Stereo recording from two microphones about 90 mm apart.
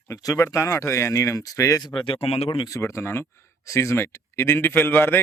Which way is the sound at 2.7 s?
30° left (ahead or behind).